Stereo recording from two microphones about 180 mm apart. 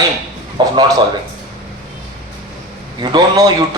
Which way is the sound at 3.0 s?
20° right (ahead or behind).